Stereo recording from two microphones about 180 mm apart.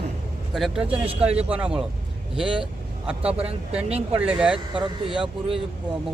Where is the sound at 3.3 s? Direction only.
35° right (ahead or behind).